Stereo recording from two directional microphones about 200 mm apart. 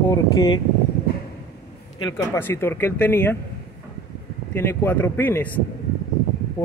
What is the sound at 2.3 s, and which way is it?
Speech, 10° left (ahead or behind).